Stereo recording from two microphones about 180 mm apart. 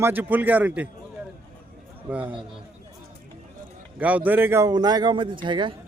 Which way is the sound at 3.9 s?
10° right (ahead or behind).